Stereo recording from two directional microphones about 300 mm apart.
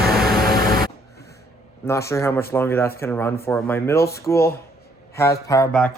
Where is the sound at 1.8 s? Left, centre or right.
Centre.